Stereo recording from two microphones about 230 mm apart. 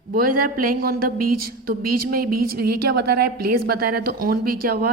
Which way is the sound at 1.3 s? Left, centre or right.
Right.